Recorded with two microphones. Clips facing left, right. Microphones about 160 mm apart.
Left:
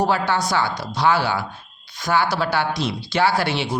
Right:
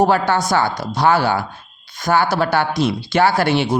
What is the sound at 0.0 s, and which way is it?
Speech, 45° right (ahead or behind).